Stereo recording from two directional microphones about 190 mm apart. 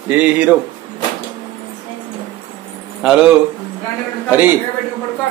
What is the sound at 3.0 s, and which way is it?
Speech, 5° right (ahead or behind).